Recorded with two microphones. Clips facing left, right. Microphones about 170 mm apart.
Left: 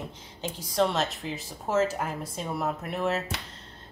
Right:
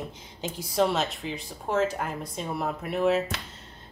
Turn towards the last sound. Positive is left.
turn(degrees=0)  # may be behind; listen again after turning